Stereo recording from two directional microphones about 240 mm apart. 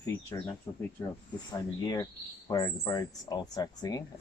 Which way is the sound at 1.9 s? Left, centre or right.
Centre.